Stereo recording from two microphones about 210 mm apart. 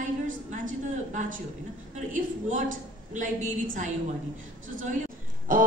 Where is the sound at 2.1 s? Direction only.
40° right (ahead or behind).